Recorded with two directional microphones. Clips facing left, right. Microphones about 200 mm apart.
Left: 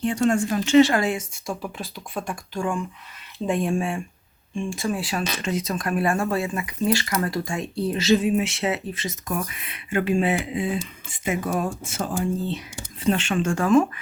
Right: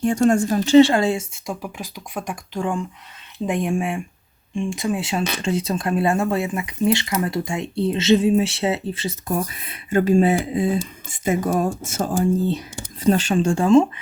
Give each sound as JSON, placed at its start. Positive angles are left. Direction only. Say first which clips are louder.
{"t": 0.0, "sound": "speech", "louder": "right 4 dB", "side_deg": -45}
{"t": 1.6, "sound": "speech", "louder": "right 1 dB", "side_deg": -15}